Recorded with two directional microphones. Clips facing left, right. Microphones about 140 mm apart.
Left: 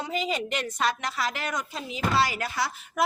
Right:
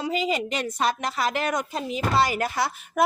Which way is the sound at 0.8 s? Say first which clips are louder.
Right 3 dB; 25° right (ahead or behind).